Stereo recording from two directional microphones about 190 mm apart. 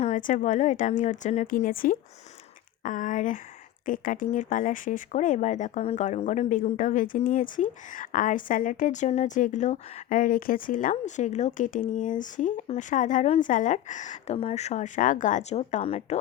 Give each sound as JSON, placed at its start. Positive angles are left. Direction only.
{"t": 0.0, "sound": "a woman's voice", "side_deg": 40}